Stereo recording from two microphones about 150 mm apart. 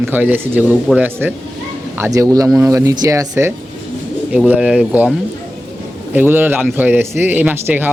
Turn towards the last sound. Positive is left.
turn(degrees=-10)  # may be behind; listen again after turning